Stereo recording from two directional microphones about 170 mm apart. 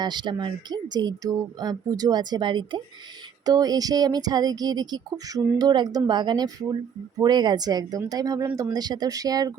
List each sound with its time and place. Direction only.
0.0 s speech: 25° right (ahead or behind)